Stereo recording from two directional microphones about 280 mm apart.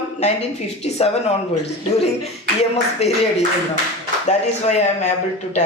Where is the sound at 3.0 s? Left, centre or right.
Left.